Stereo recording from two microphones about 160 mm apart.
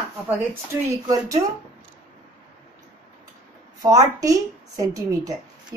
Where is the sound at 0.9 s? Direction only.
20° right (ahead or behind).